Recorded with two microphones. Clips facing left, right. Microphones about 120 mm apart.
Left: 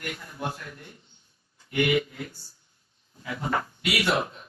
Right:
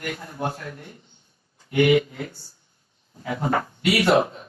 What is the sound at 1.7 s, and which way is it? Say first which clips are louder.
Speech: right 6 dB; 30° right (ahead or behind).